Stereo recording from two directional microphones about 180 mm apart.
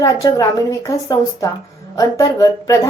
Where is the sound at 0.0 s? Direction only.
20° left (ahead or behind).